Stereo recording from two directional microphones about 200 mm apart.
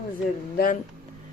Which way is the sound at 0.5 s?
45° left (ahead or behind).